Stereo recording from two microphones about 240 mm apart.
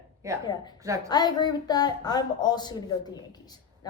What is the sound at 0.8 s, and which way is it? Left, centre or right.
Speech, centre.